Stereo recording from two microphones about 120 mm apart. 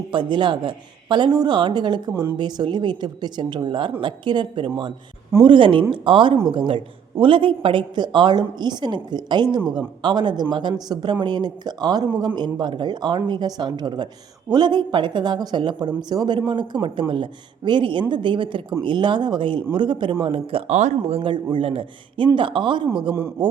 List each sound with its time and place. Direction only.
0.1 s a man's voice: 40° right (ahead or behind)
20.7 s speech: 75° right (ahead or behind)
21.2 s a man's voice: 40° right (ahead or behind)